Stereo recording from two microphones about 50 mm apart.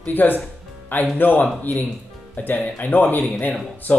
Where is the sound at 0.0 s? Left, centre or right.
Left.